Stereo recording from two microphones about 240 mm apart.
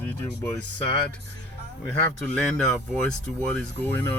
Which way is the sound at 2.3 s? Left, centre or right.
Centre.